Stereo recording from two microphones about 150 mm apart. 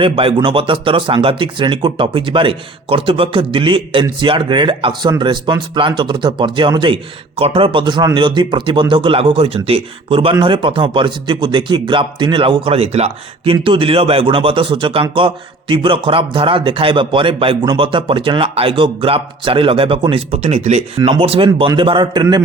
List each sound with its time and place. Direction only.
0.0 s a man's voice: 35° right (ahead or behind)
21.1 s a man's voice: 40° right (ahead or behind)